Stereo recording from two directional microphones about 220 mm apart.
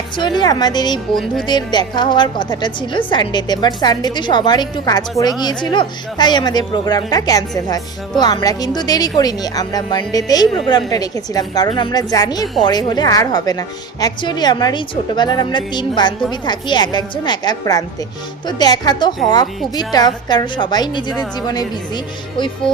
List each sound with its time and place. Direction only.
0.2 s a woman's voice: 20° left (ahead or behind)